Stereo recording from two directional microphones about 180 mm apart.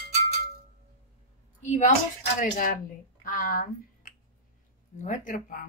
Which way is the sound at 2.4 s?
50° left (ahead or behind).